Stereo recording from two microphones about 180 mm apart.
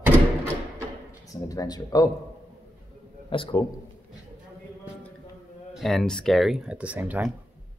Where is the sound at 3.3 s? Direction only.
25° left (ahead or behind).